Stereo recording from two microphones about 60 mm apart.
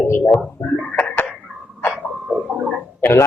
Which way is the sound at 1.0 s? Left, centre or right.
Centre.